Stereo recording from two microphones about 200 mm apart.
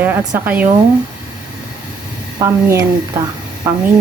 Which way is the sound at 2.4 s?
15° right (ahead or behind).